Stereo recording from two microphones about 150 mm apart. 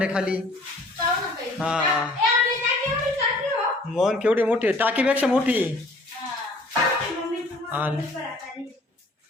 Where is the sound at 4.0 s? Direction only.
5° right (ahead or behind).